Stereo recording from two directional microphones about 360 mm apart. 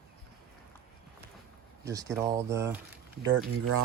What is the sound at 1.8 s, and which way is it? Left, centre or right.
Speech, centre.